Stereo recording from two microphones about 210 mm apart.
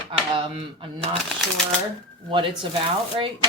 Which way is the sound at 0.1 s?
25° right (ahead or behind).